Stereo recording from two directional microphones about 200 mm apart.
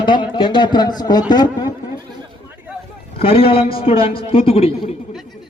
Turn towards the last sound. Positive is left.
turn(degrees=30)  # may be behind; listen again after turning